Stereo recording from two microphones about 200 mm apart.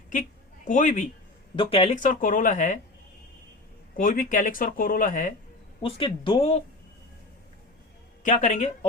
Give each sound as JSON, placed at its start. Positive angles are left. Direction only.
{"t": 0.1, "sound": "a sound", "side_deg": 40}
{"t": 1.5, "sound": "speech", "side_deg": 30}
{"t": 3.9, "sound": "speech", "side_deg": 45}
{"t": 5.8, "sound": "speech", "side_deg": 25}
{"t": 8.2, "sound": "speech", "side_deg": 40}